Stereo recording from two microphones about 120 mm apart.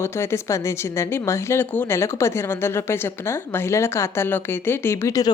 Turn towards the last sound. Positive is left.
turn(degrees=30)  # may be behind; listen again after turning